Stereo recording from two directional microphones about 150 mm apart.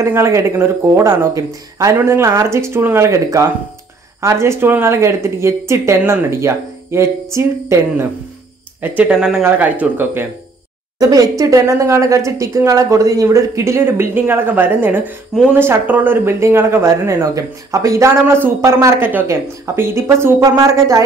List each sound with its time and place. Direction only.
0.0 s speech: 20° right (ahead or behind)
11.0 s speech: 25° right (ahead or behind)